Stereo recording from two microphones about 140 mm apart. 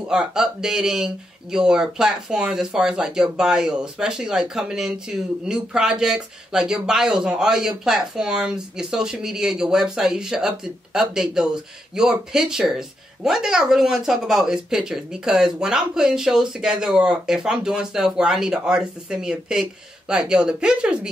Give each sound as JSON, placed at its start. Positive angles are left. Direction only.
{"t": 0.1, "sound": "speech", "side_deg": -5}